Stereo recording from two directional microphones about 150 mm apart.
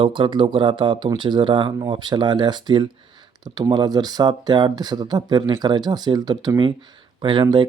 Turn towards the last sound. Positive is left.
turn(degrees=-30)  # may be behind; listen again after turning